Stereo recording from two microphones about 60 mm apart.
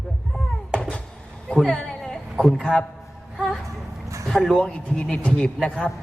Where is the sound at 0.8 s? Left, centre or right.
Centre.